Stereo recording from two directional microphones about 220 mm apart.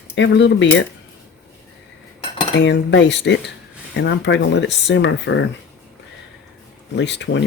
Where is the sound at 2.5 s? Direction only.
55° left (ahead or behind).